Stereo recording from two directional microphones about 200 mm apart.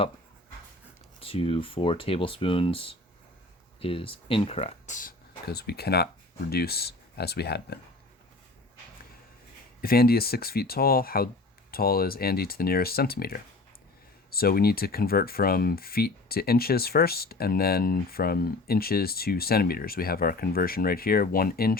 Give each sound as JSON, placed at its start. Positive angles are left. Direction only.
{"t": 1.2, "sound": "speech", "side_deg": 30}
{"t": 9.8, "sound": "speech", "side_deg": 50}